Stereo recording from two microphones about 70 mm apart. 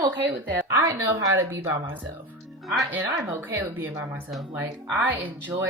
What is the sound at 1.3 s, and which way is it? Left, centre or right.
Speech, right.